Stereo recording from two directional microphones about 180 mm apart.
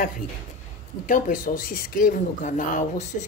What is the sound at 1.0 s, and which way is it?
Speech, 50° left (ahead or behind).